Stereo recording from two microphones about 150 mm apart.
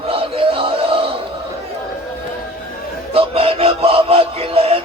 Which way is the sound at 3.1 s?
40° right (ahead or behind).